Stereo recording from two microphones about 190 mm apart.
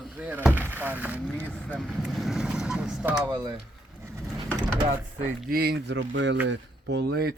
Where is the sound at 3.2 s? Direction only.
20° right (ahead or behind).